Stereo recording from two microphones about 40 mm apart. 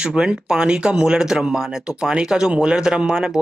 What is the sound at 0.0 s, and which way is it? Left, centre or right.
Speech, right.